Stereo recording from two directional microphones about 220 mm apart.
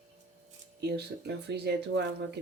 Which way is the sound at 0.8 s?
50° right (ahead or behind).